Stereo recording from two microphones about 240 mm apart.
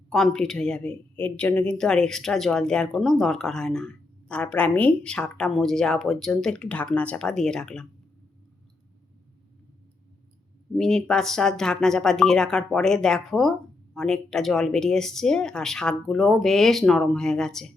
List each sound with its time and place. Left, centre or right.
0.1 s speech: centre
10.8 s speech: centre